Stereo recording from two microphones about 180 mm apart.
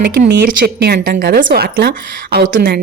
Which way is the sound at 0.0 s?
75° right (ahead or behind).